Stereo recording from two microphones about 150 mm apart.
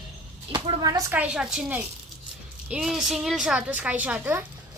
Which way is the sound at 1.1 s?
5° right (ahead or behind).